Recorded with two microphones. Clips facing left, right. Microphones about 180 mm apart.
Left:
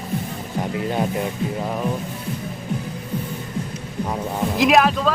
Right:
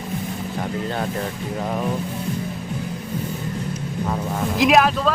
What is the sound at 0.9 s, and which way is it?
Speech, 15° left (ahead or behind).